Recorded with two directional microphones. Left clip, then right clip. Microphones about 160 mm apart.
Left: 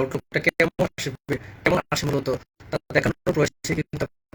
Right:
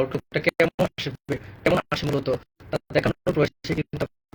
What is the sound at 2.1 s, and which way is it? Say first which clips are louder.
Speech: even; 35° left (ahead or behind).